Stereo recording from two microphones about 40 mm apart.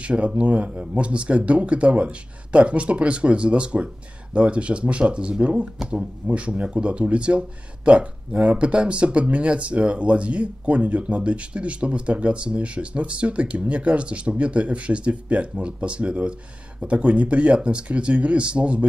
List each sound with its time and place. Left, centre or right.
0.0 s speech: right